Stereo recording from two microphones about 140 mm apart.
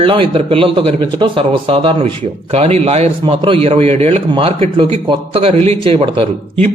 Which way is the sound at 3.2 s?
40° right (ahead or behind).